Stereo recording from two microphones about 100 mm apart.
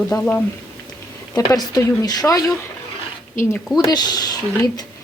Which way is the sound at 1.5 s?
35° left (ahead or behind).